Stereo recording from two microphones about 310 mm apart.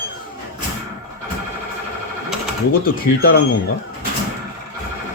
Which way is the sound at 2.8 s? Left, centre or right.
Left.